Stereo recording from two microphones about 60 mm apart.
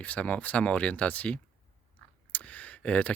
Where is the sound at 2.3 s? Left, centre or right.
Left.